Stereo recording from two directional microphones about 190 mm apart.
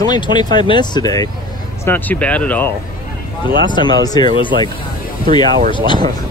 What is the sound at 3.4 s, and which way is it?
Speech, 25° left (ahead or behind).